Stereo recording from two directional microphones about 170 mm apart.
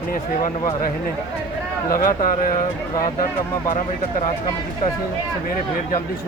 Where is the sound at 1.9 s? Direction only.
55° left (ahead or behind).